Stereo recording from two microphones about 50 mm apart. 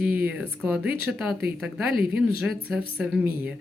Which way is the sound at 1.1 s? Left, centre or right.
Centre.